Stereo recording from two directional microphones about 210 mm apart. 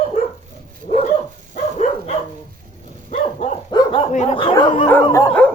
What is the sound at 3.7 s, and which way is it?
Dog, 20° left (ahead or behind).